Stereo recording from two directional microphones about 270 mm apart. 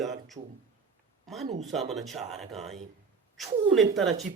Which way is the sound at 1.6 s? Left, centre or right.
Centre.